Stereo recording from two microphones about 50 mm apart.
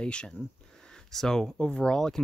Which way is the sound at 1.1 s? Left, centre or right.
Centre.